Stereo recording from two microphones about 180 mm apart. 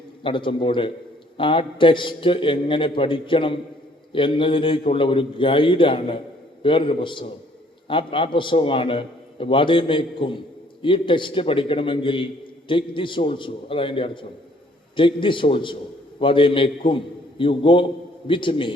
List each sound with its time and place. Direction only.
0.2 s a man's voice: 30° left (ahead or behind)